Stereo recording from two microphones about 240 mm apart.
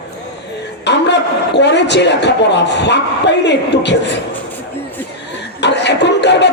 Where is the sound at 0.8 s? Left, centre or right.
Left.